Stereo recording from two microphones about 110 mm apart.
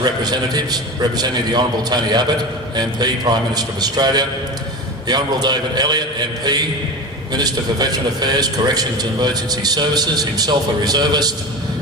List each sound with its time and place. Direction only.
0.0 s a man's voice: 40° right (ahead or behind)